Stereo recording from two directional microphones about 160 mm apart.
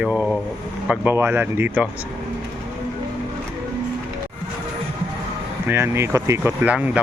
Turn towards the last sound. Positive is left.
turn(degrees=-10)  # may be behind; listen again after turning